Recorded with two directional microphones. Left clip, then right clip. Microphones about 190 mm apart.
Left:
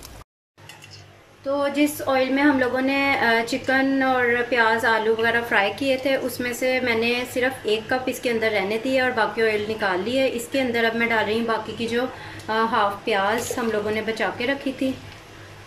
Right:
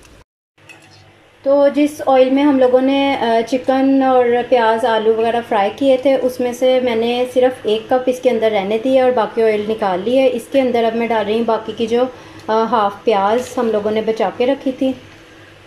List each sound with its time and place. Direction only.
1.5 s speech: 20° right (ahead or behind)